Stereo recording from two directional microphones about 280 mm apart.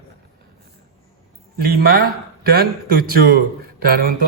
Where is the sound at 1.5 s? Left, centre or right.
Right.